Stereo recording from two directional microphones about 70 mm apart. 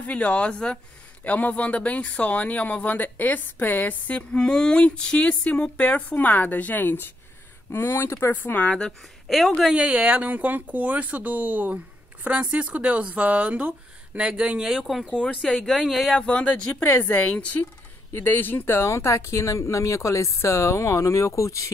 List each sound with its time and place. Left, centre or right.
0.0 s speech: centre
4.4 s speech: centre
9.3 s speech: centre
9.7 s speech: centre
14.8 s speech: centre
16.2 s speech: centre; by 21.6 s left